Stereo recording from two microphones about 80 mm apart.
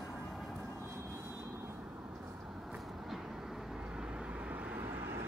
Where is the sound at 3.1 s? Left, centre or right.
Centre.